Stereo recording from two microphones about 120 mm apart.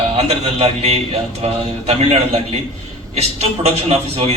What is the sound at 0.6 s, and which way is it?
A man's voice, 60° right (ahead or behind).